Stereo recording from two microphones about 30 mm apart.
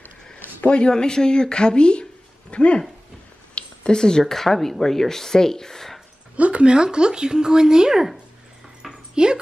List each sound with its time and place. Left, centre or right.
0.7 s speech: left
0.9 s speech: left
3.5 s a sound: left
4.2 s speech: centre
6.3 s speech: right
9.1 s speech: right